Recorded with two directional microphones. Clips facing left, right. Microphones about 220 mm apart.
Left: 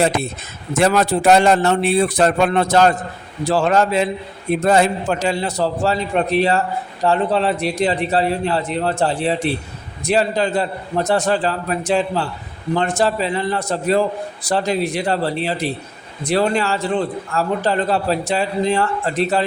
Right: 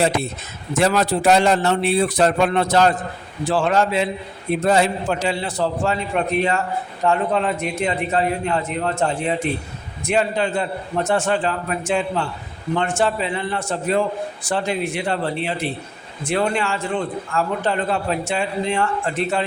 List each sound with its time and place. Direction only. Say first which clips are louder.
0.8 s a man's voice: left 2 dB; 50° left (ahead or behind)